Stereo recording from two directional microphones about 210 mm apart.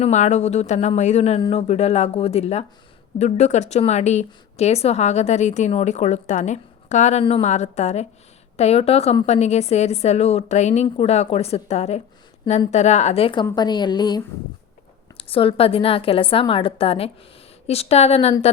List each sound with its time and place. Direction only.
0.0 s a woman's voice: 35° left (ahead or behind)
15.2 s a woman's voice: 25° left (ahead or behind)